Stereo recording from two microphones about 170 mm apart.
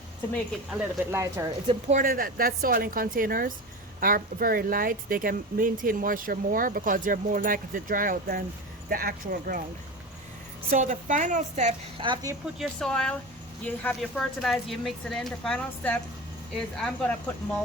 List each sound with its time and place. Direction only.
0.7 s speech: 10° right (ahead or behind)
1.6 s speech: 45° right (ahead or behind)
10.7 s a woman's voice: 50° right (ahead or behind)
11.9 s speech: 25° right (ahead or behind)
12.5 s a woman's voice: 5° left (ahead or behind)